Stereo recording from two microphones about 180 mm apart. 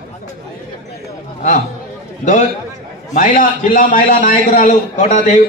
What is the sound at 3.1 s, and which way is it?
A man's voice, 50° left (ahead or behind).